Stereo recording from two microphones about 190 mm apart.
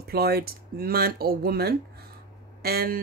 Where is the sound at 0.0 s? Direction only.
55° right (ahead or behind).